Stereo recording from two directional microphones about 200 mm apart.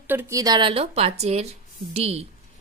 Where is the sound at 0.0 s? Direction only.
10° right (ahead or behind).